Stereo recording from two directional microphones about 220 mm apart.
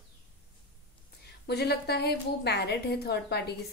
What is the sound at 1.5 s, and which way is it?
A woman's voice, 45° left (ahead or behind).